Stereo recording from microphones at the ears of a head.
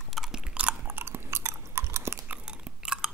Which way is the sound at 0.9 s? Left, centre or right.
Right.